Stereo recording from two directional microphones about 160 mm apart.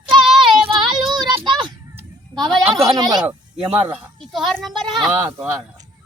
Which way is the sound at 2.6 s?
20° right (ahead or behind).